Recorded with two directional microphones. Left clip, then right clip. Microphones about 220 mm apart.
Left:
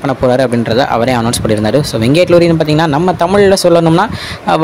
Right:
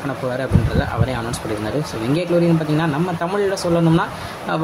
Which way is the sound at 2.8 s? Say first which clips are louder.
Left 10 dB; 40° left (ahead or behind).